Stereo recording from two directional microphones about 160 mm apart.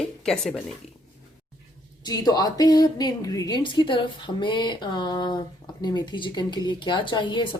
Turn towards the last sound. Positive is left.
turn(degrees=30)  # may be behind; listen again after turning